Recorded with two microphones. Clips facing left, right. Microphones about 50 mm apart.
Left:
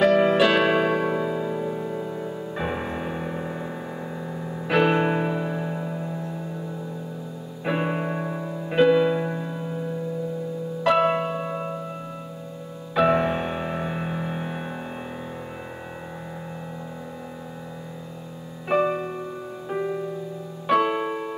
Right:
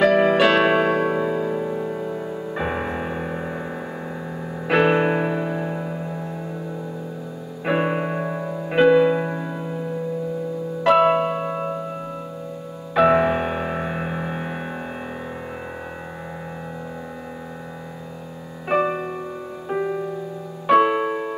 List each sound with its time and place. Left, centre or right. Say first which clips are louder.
0.1 s music: right 2 dB; centre
0.4 s music: right 2 dB; centre
7.6 s music: right 4 dB; centre
12.9 s music: right 4 dB; centre
18.7 s music: right 1 dB; centre